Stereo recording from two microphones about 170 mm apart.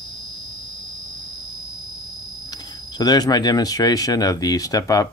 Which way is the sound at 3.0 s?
25° left (ahead or behind).